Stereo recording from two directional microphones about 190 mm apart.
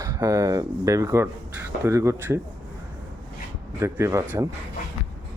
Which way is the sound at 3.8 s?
15° right (ahead or behind).